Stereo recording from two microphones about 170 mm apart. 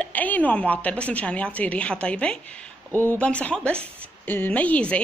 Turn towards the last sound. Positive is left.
turn(degrees=10)  # may be behind; listen again after turning